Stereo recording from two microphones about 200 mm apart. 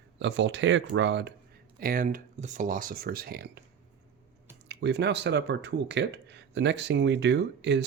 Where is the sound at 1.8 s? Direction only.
45° right (ahead or behind).